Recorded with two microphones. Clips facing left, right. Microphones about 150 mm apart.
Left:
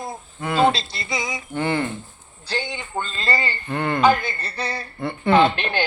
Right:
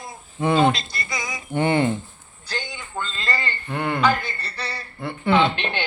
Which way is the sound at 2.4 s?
30° left (ahead or behind).